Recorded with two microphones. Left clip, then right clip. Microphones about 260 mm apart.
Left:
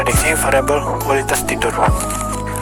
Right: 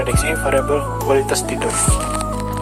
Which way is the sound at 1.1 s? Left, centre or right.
Left.